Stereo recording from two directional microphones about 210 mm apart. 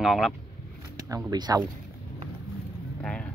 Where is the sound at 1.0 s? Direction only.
15° right (ahead or behind).